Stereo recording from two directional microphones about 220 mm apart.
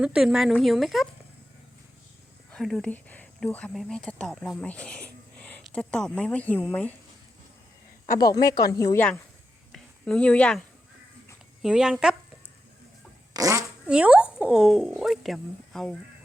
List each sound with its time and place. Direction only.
0.0 s speech: 5° right (ahead or behind)
2.5 s speech: centre (ahead or behind)
8.2 s speech: 15° left (ahead or behind)
9.7 s a sound: 5° left (ahead or behind)
11.6 s speech: centre (ahead or behind)
13.3 s speech: 15° right (ahead or behind); by 16.0 s centre (ahead or behind)